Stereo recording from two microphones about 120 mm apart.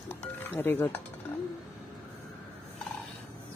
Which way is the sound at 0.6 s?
15° left (ahead or behind).